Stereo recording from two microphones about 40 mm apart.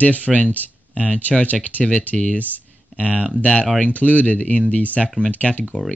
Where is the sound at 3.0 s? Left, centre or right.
Right.